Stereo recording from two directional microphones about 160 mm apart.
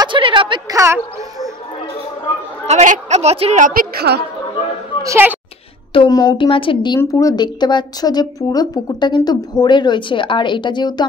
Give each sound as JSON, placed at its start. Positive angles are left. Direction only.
{"t": 0.0, "sound": "a woman's voice", "side_deg": -30}
{"t": 0.7, "sound": "speech", "side_deg": -15}
{"t": 2.6, "sound": "a woman's voice", "side_deg": -45}
{"t": 5.0, "sound": "speech", "side_deg": -15}
{"t": 5.9, "sound": "speech", "side_deg": 25}